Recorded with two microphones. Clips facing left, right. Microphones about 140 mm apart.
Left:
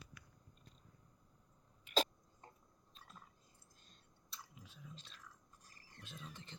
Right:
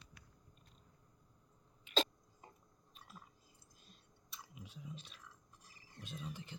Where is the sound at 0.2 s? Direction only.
25° right (ahead or behind).